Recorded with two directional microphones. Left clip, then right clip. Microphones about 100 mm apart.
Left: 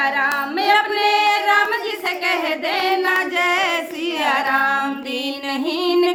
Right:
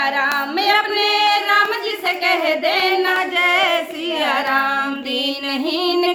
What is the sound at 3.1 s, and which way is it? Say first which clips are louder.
Singing: right 1 dB; 45° left (ahead or behind).